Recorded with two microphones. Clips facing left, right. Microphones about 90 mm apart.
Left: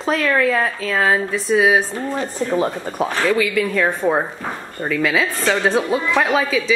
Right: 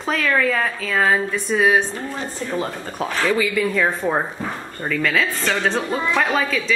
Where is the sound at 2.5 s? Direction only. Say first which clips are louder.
Left 5 dB; 20° left (ahead or behind).